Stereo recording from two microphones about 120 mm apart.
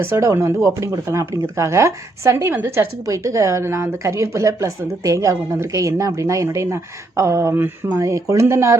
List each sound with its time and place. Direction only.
0.0 s speech: 25° right (ahead or behind)